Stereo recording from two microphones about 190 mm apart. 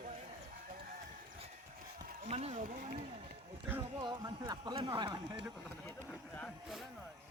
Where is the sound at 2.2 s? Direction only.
35° right (ahead or behind).